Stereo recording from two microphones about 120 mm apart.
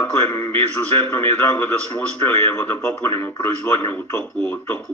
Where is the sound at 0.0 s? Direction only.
15° left (ahead or behind).